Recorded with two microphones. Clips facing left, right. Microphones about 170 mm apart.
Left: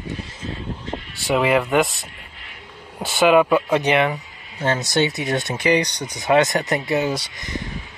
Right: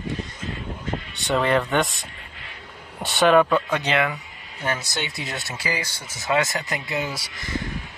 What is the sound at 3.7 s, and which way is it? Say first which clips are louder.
Speech: left 5 dB; 25° left (ahead or behind).